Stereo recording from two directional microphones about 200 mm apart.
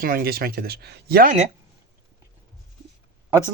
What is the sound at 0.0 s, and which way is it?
Speech, 50° right (ahead or behind).